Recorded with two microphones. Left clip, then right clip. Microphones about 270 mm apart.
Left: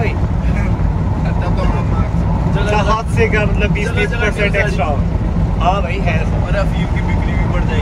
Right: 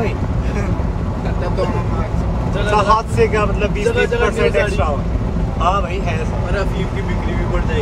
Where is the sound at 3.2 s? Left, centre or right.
Centre.